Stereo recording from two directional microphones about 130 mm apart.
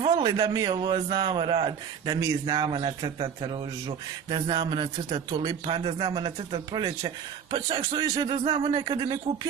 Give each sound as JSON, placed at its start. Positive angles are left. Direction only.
{"t": 0.0, "sound": "a man's voice", "side_deg": -35}